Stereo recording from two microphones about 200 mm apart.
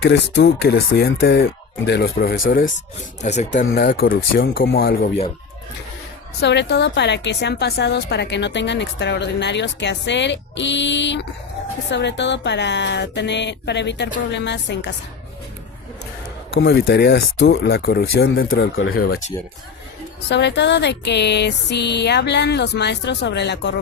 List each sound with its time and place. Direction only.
0.0 s a woman's voice: 60° left (ahead or behind); by 3.7 s 35° left (ahead or behind)
3.8 s speech: 45° left (ahead or behind)
6.4 s a woman's voice: 60° left (ahead or behind)
16.5 s speech: 60° left (ahead or behind)
20.3 s a woman's voice: 60° left (ahead or behind)